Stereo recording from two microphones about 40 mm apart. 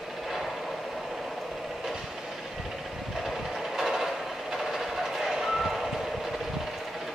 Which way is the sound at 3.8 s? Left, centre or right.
Centre.